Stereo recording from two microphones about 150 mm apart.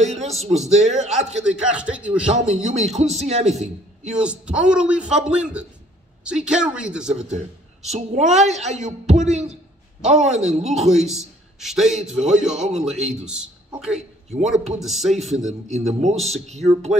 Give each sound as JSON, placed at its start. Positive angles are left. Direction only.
{"t": 0.0, "sound": "a man's voice", "side_deg": -45}
{"t": 1.4, "sound": "a man's voice", "side_deg": -5}
{"t": 2.4, "sound": "a man's voice", "side_deg": -50}
{"t": 4.1, "sound": "a man's voice", "side_deg": -5}
{"t": 7.8, "sound": "a man's voice", "side_deg": -50}
{"t": 11.1, "sound": "a man's voice", "side_deg": 0}
{"t": 15.7, "sound": "a man's voice", "side_deg": -50}
{"t": 16.2, "sound": "speech", "side_deg": 0}
{"t": 16.5, "sound": "a man's voice", "side_deg": -45}